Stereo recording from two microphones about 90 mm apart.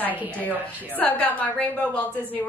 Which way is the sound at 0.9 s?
15° left (ahead or behind).